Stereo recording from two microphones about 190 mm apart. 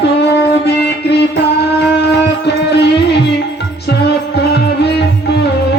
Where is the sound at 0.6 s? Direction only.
60° left (ahead or behind).